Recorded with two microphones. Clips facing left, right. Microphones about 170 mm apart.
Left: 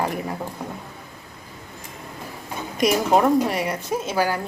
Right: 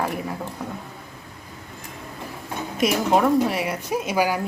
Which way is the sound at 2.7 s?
Centre (ahead or behind).